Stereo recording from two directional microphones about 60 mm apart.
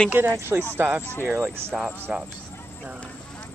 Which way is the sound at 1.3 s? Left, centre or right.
Right.